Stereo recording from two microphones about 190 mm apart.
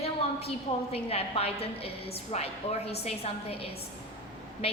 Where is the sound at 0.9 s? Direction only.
30° left (ahead or behind).